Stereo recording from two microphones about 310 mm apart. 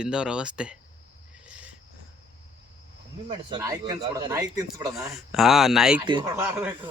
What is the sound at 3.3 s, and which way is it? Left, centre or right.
Speech, centre.